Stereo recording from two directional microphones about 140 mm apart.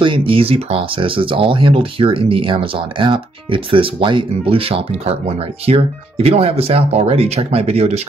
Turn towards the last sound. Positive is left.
turn(degrees=-50)  # may be behind; listen again after turning